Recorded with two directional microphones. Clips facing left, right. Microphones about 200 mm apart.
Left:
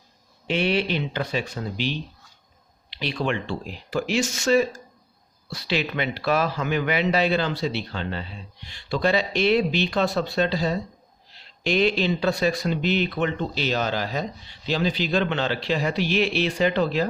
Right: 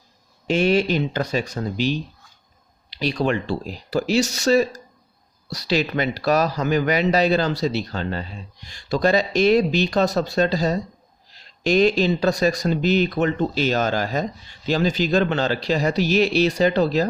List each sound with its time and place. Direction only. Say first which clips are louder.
0.4 s speech: right 5 dB; 45° right (ahead or behind)